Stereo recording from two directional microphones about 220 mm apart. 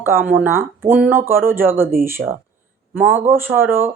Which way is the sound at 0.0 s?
10° right (ahead or behind).